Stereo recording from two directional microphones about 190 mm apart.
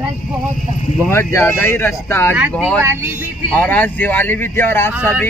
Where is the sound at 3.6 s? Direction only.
10° left (ahead or behind).